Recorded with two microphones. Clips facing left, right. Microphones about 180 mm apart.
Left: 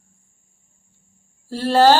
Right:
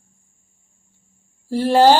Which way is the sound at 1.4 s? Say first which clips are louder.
Right 1 dB; 15° right (ahead or behind).